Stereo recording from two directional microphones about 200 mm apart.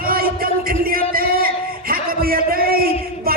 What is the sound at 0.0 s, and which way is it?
Music, 45° right (ahead or behind).